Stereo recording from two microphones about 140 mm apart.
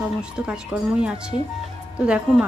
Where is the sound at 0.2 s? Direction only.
5° right (ahead or behind).